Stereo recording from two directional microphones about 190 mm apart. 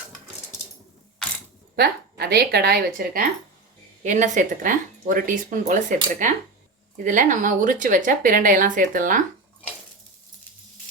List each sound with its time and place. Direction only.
1.7 s speech: 55° right (ahead or behind)
4.0 s speech: 40° right (ahead or behind)